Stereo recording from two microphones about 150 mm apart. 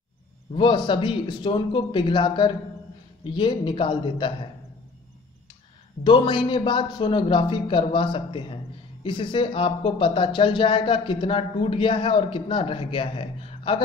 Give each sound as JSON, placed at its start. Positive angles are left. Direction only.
{"t": 0.6, "sound": "speech", "side_deg": 35}
{"t": 6.0, "sound": "speech", "side_deg": 35}